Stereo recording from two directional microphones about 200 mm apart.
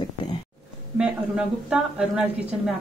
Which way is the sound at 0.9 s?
5° right (ahead or behind).